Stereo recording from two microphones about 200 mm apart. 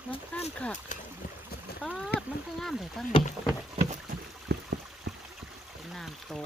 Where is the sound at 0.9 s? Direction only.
40° left (ahead or behind).